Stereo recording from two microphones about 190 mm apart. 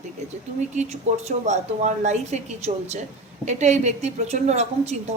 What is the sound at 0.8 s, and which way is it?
A woman's voice, 35° right (ahead or behind).